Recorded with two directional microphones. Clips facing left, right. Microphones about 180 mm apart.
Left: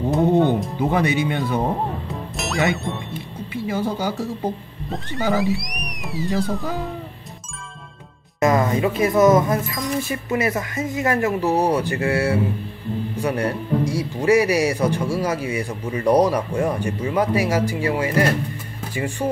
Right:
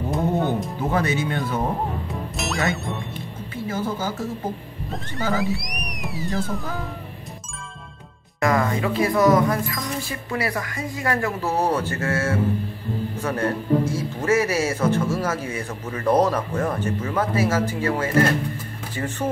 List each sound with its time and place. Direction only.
0.1 s music: centre (ahead or behind)
0.7 s a man's voice: 15° left (ahead or behind)
2.3 s speech: centre (ahead or behind)
3.6 s a man's voice: 15° left (ahead or behind)
4.9 s speech: centre (ahead or behind)
8.4 s a man's voice: 20° left (ahead or behind)